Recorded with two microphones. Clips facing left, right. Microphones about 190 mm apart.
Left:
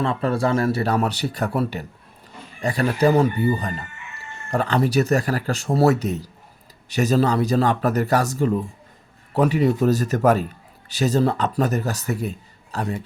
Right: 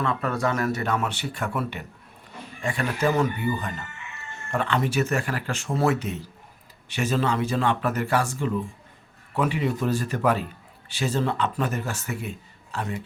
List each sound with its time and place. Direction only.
0.0 s speech: 30° left (ahead or behind)